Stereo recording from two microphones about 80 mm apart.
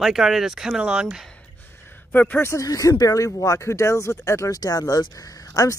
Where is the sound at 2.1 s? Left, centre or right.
Left.